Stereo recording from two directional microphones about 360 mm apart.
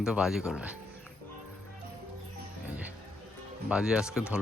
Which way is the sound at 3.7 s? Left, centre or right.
Centre.